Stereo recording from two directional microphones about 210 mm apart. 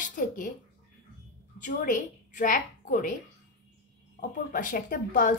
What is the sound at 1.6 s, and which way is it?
A woman's voice, 40° left (ahead or behind).